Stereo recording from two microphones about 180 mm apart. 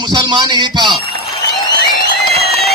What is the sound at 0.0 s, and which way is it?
Speech, 25° right (ahead or behind).